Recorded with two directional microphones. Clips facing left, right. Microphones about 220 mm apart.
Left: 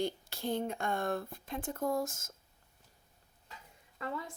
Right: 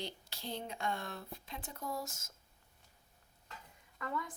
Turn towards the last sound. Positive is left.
turn(degrees=30)  # may be behind; listen again after turning